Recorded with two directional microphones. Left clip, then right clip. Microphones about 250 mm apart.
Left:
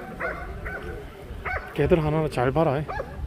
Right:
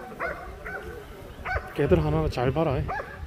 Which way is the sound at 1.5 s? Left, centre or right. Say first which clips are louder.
Left 1 dB; left.